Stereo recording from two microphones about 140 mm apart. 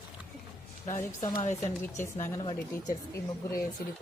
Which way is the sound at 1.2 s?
30° left (ahead or behind).